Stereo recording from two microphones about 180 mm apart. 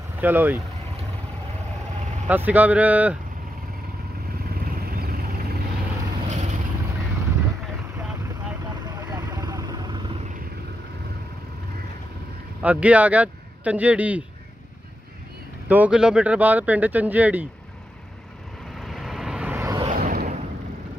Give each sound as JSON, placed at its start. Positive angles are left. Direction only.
{"t": 0.2, "sound": "speech", "side_deg": -10}
{"t": 2.2, "sound": "speech", "side_deg": -10}
{"t": 4.9, "sound": "vehicle", "side_deg": -55}
{"t": 6.2, "sound": "vehicle", "side_deg": -40}
{"t": 9.1, "sound": "vehicle", "side_deg": -20}
{"t": 12.6, "sound": "speech", "side_deg": -10}
{"t": 15.7, "sound": "speech", "side_deg": -5}
{"t": 18.8, "sound": "vehicle", "side_deg": 0}
{"t": 19.9, "sound": "boat", "side_deg": -50}